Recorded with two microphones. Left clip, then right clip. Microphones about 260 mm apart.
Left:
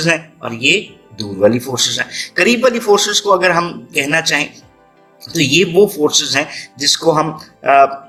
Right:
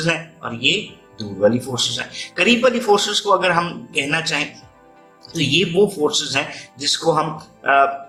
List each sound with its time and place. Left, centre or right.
0.0 s a man's voice: left